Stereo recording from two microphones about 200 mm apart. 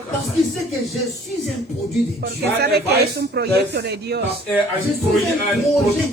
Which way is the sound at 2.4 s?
55° right (ahead or behind).